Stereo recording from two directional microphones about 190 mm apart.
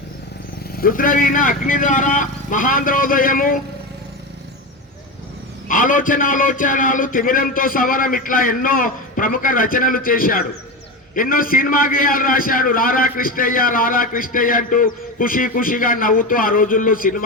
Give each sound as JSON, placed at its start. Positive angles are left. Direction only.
{"t": 0.7, "sound": "a man's voice", "side_deg": 50}
{"t": 5.6, "sound": "a man's voice", "side_deg": 45}